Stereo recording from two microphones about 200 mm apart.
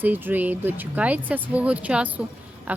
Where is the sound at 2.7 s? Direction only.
5° right (ahead or behind).